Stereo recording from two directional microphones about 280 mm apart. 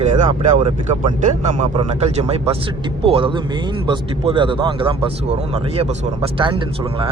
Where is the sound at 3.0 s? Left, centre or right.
Centre.